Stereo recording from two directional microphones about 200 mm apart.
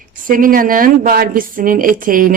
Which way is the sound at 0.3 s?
45° right (ahead or behind).